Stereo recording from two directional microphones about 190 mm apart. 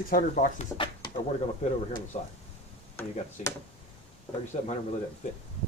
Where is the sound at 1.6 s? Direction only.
35° left (ahead or behind).